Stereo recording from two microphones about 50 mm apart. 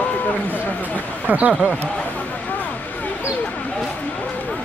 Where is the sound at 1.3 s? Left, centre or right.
Right.